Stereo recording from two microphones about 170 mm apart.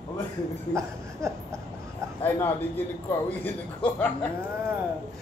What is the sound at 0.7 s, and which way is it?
Laughter, 15° right (ahead or behind).